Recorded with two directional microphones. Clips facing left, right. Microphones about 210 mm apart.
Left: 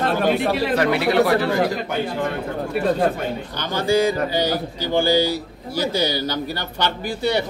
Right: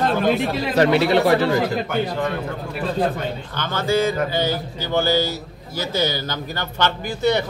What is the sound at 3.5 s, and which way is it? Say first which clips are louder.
A man's voice: left 1 dB; 15° left (ahead or behind).